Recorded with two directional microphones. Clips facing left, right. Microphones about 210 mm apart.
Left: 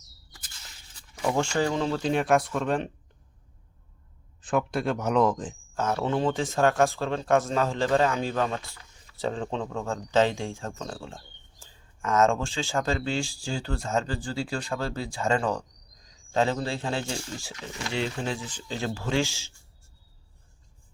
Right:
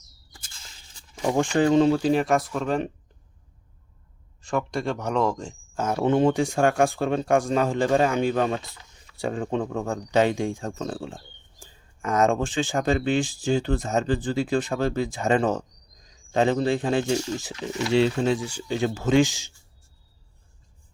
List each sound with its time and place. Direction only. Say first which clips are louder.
0.4 s a sound: left 1 dB; 25° right (ahead or behind)
1.9 s speech: right 3 dB; 5° right (ahead or behind)
4.4 s speech: even; centre (ahead or behind)
5.7 s speech: right 5 dB; 10° right (ahead or behind); by 18.3 s 30° right (ahead or behind)
18.3 s speech: right 7 dB; 15° right (ahead or behind)